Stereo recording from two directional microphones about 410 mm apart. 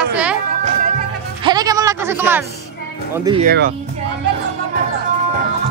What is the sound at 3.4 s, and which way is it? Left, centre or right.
Speech, right.